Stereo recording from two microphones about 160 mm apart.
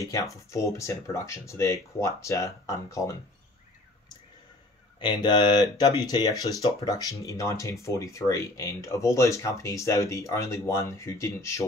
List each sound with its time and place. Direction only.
0.0 s speech: 20° left (ahead or behind)
5.0 s speech: 25° left (ahead or behind)